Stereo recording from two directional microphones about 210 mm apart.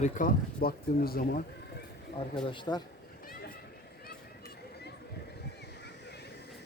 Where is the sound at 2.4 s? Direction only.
20° left (ahead or behind).